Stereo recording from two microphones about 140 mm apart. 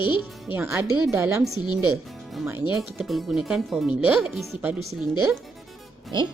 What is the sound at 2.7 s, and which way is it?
Speech, centre (ahead or behind).